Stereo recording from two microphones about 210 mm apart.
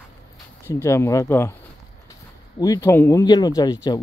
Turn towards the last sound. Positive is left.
turn(degrees=15)  # may be behind; listen again after turning